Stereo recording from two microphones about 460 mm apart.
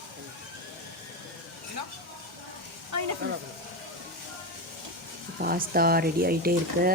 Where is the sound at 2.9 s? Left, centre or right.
Right.